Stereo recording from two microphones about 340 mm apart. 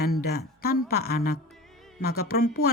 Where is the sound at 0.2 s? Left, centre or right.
Left.